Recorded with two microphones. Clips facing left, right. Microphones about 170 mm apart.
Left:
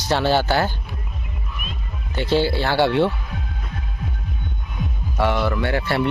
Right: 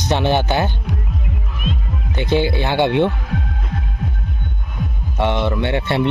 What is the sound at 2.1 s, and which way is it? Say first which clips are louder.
Speech: right 1 dB; 20° right (ahead or behind).